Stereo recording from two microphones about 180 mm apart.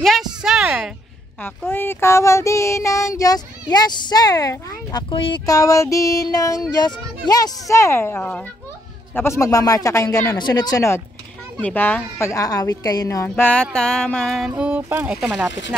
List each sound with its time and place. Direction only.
0.0 s a sound: centre (ahead or behind)
1.7 s a woman's voice: 10° left (ahead or behind)
14.5 s speech: 10° right (ahead or behind)